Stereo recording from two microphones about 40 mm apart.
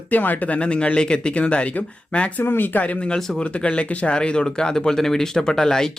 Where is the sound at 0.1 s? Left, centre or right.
Left.